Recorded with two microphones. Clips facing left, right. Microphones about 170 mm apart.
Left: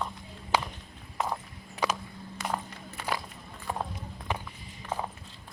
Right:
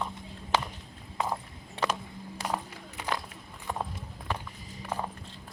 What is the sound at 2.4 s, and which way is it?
Run, 35° right (ahead or behind).